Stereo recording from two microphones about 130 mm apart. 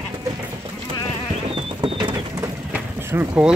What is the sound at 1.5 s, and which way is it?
Bird, 40° right (ahead or behind).